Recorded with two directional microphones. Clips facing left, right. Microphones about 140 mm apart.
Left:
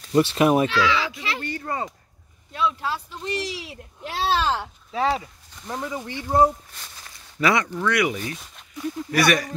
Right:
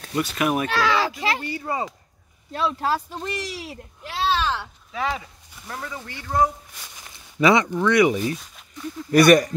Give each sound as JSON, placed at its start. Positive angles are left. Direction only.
{"t": 0.1, "sound": "speech", "side_deg": 30}
{"t": 0.7, "sound": "speech", "side_deg": -45}
{"t": 1.4, "sound": "speech", "side_deg": -10}
{"t": 2.5, "sound": "speech", "side_deg": -40}
{"t": 4.1, "sound": "speech", "side_deg": 40}
{"t": 5.7, "sound": "speech", "side_deg": 20}
{"t": 6.7, "sound": "speech", "side_deg": -15}
{"t": 8.4, "sound": "a sound", "side_deg": 5}
{"t": 9.1, "sound": "speech", "side_deg": -45}